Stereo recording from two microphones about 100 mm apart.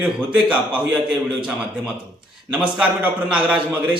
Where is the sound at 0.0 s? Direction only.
15° right (ahead or behind).